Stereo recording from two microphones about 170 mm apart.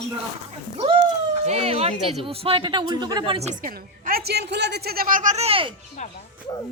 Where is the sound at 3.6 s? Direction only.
60° right (ahead or behind); by 5.7 s 35° right (ahead or behind).